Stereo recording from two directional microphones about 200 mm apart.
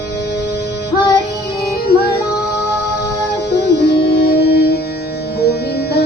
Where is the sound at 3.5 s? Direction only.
55° left (ahead or behind).